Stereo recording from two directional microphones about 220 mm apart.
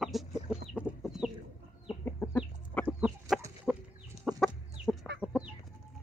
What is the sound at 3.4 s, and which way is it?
Chicken, 10° right (ahead or behind).